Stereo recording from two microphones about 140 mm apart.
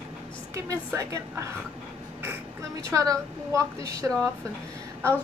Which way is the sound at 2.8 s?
25° right (ahead or behind).